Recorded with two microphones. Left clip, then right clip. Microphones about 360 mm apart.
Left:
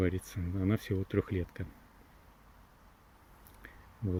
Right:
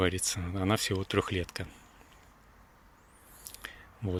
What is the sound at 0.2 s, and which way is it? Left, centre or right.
Speech, right.